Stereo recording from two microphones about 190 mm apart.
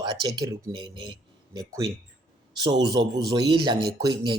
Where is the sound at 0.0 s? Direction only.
25° right (ahead or behind).